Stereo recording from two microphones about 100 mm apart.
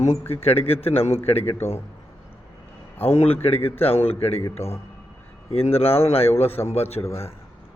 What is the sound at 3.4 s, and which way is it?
A man's voice, 85° left.